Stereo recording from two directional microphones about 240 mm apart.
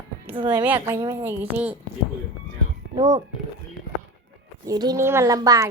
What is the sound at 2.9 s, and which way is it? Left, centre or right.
Speech, right.